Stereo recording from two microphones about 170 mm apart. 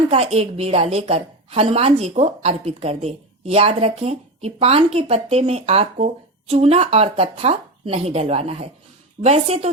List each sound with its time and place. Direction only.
0.1 s a woman's voice: 35° right (ahead or behind)